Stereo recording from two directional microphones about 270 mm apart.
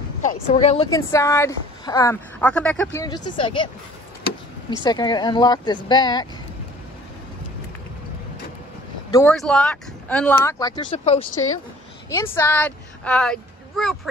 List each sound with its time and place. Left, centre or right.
0.2 s speech: left
4.8 s speech: centre
9.1 s speech: centre
12.1 s speech: centre